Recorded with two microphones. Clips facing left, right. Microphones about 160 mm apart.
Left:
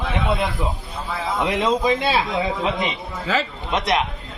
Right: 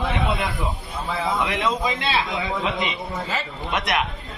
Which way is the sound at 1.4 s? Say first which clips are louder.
Left 3 dB; 20° left (ahead or behind).